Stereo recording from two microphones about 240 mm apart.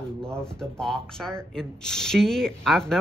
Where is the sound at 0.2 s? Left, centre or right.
Centre.